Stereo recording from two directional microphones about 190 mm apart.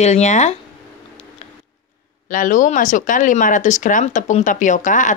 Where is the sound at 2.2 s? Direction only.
45° left (ahead or behind).